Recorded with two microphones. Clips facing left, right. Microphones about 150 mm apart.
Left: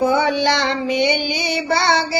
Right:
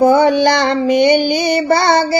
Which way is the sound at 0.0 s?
45° right (ahead or behind).